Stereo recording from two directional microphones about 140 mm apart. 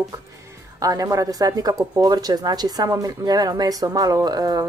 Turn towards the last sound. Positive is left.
turn(degrees=-30)  # may be behind; listen again after turning